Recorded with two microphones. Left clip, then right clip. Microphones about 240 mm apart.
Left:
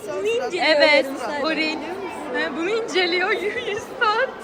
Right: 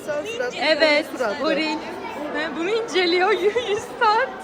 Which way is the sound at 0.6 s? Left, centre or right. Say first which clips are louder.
Left 2 dB; centre.